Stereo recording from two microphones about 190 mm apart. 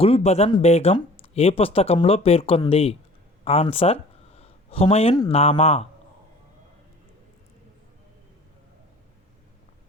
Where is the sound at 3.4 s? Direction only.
30° left (ahead or behind).